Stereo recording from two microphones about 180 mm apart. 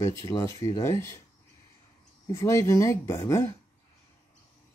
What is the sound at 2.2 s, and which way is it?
Speech, 15° left (ahead or behind).